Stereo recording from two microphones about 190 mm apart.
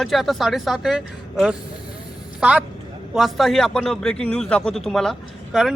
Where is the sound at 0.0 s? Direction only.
Centre (ahead or behind).